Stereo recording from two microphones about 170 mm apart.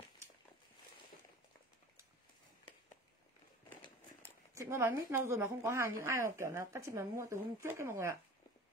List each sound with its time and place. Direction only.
4.6 s a woman's voice: 15° right (ahead or behind)